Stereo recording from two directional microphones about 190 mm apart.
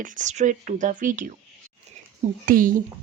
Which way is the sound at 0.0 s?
45° right (ahead or behind).